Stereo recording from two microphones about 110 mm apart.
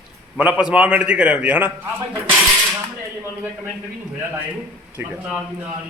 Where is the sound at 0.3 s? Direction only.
10° right (ahead or behind).